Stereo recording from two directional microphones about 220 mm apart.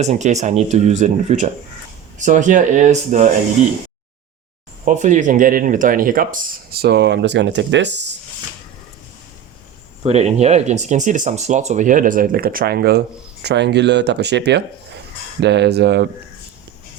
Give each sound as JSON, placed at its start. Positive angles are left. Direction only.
{"t": 0.0, "sound": "speech", "side_deg": -30}
{"t": 4.9, "sound": "speech", "side_deg": -35}
{"t": 10.0, "sound": "speech", "side_deg": -30}